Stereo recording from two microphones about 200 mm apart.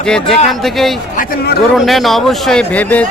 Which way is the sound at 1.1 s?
50° left (ahead or behind).